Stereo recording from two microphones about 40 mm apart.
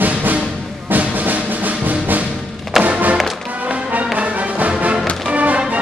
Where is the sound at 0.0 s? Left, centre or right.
Right.